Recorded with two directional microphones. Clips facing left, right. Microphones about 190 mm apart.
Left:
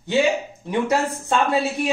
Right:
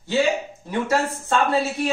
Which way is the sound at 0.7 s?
15° left (ahead or behind).